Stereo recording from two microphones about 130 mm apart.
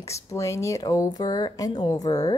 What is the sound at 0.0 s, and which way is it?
Speech, 25° left (ahead or behind).